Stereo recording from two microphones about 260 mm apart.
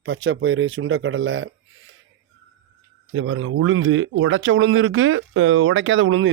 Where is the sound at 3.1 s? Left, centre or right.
Right.